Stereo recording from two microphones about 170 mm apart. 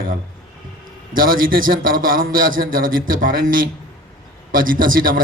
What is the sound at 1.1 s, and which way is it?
A man's voice, 55° right (ahead or behind).